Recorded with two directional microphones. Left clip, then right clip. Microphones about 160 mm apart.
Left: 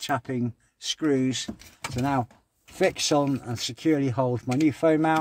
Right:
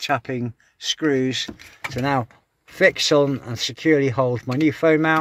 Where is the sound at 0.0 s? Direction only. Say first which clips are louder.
Right 5 dB; 15° right (ahead or behind).